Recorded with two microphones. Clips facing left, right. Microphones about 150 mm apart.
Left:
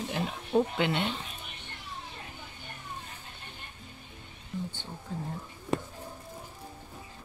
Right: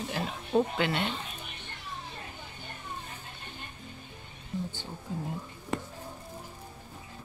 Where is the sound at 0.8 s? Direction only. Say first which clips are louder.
Left 1 dB; 20° left (ahead or behind).